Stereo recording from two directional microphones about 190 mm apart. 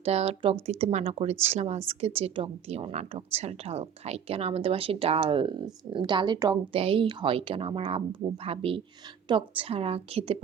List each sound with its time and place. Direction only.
0.0 s speech: 30° right (ahead or behind)